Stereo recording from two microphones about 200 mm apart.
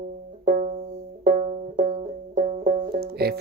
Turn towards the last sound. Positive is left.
turn(degrees=-50)  # may be behind; listen again after turning